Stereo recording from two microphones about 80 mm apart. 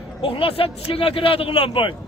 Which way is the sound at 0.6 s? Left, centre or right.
Left.